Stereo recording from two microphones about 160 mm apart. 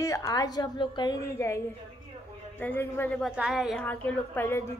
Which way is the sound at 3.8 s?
10° left (ahead or behind).